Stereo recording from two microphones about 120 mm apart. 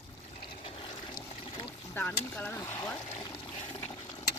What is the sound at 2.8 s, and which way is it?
Speech, 30° left (ahead or behind).